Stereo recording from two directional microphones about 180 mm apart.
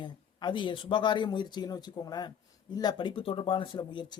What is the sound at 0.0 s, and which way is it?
Speech, 25° left (ahead or behind).